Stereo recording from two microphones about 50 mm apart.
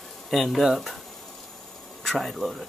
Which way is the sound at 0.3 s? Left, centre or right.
Centre.